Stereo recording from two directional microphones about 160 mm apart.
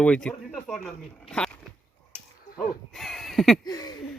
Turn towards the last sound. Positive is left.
turn(degrees=25)  # may be behind; listen again after turning